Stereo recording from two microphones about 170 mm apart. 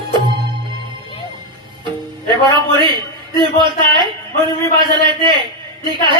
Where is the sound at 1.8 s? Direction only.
25° right (ahead or behind).